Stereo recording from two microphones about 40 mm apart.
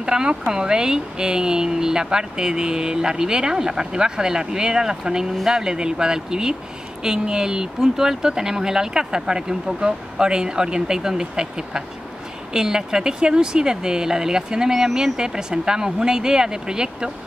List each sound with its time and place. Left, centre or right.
0.0 s speech: centre